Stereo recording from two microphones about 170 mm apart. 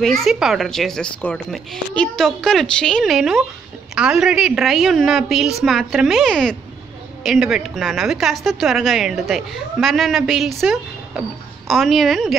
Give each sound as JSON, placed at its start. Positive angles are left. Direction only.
{"t": 0.0, "sound": "a woman's voice", "side_deg": 0}